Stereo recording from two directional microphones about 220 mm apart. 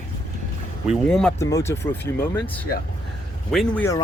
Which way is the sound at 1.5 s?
15° left (ahead or behind).